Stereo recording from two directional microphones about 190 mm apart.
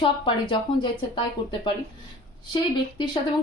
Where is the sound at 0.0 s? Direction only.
25° left (ahead or behind).